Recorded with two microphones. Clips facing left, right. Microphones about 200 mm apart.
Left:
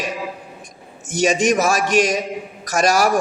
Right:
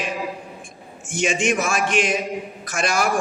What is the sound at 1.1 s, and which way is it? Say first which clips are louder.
A man's voice: left 5 dB; 40° left (ahead or behind).